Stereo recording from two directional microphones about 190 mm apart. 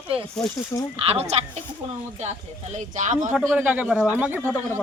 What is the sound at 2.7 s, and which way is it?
Speech, 40° right (ahead or behind).